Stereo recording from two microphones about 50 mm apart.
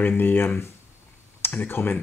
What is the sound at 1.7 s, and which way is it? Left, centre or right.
Speech, left.